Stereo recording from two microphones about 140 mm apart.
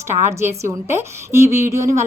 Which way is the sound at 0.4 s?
20° right (ahead or behind).